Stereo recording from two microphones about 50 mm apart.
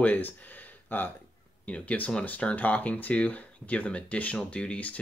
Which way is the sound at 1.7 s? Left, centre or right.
Left.